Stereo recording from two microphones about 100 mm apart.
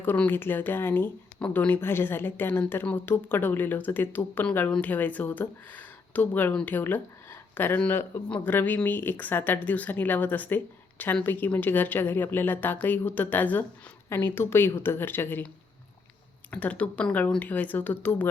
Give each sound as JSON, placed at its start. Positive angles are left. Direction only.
{"t": 0.0, "sound": "speech", "side_deg": 20}
{"t": 16.5, "sound": "speech", "side_deg": 15}